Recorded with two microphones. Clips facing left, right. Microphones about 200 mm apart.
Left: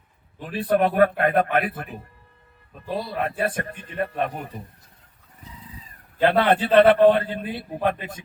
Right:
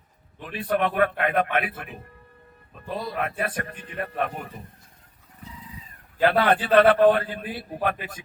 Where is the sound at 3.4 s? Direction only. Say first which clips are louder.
Left 4 dB; 30° left (ahead or behind).